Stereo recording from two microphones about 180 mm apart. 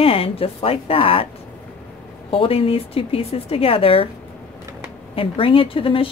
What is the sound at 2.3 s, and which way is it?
Speech, 30° left (ahead or behind).